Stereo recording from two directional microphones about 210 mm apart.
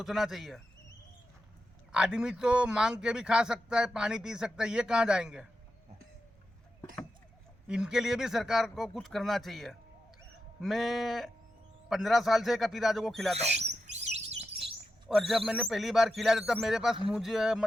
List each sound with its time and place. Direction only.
0.0 s a man's voice: centre (ahead or behind)
1.9 s a man's voice: 5° right (ahead or behind)
7.7 s a man's voice: 5° right (ahead or behind)
13.9 s chirp: 30° right (ahead or behind)
15.1 s a man's voice: centre (ahead or behind)